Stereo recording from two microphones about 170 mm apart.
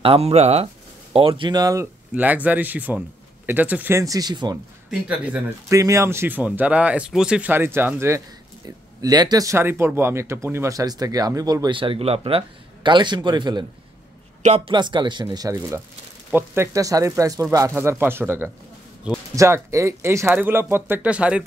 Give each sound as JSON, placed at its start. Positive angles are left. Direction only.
{"t": 0.0, "sound": "speech", "side_deg": -35}
{"t": 5.0, "sound": "speech", "side_deg": -10}
{"t": 14.4, "sound": "speech", "side_deg": -40}
{"t": 14.7, "sound": "speech", "side_deg": -25}